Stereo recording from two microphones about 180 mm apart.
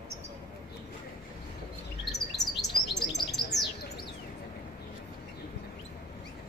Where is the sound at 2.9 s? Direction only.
70° left (ahead or behind).